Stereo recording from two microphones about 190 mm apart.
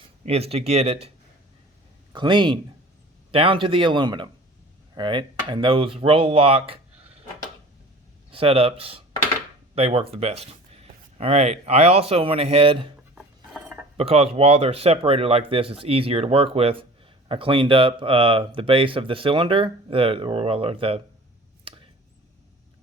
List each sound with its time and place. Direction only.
0.3 s speech: 30° right (ahead or behind)
2.1 s speech: 25° right (ahead or behind)
8.3 s speech: 30° right (ahead or behind)
13.1 s a sound: centre (ahead or behind)
13.9 s speech: 30° right (ahead or behind)